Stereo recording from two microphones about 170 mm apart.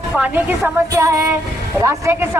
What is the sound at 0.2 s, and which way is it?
A woman's voice, 15° right (ahead or behind).